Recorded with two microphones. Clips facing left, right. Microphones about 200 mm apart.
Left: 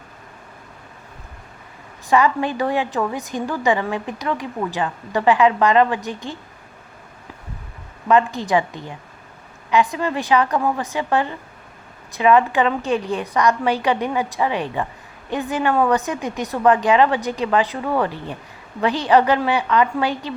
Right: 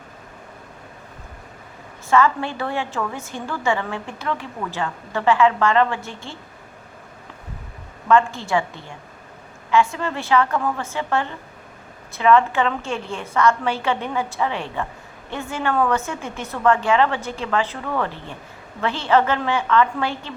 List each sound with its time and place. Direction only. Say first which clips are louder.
2.0 s a woman's voice: left 1 dB; 15° left (ahead or behind)
8.0 s a woman's voice: left 1 dB; 15° left (ahead or behind)